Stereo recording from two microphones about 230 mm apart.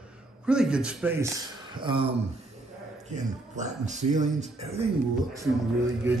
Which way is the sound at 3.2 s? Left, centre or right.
Right.